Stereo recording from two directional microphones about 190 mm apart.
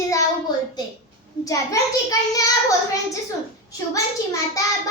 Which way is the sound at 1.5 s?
15° left (ahead or behind).